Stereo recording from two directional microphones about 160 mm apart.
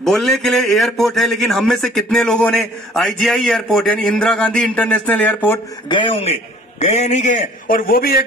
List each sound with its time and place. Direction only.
0.0 s a man's voice: centre (ahead or behind)
5.9 s a man's voice: 30° left (ahead or behind)
7.6 s a man's voice: 60° left (ahead or behind)